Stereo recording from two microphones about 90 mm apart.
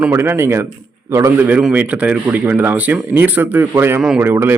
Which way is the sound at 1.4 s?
15° right (ahead or behind).